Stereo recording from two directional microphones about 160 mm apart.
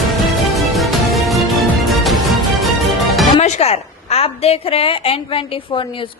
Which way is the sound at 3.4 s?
45° left (ahead or behind).